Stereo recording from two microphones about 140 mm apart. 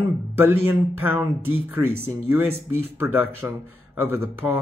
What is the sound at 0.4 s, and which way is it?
Speech, 15° right (ahead or behind).